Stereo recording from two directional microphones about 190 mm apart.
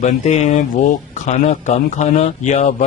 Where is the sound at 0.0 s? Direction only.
35° left (ahead or behind).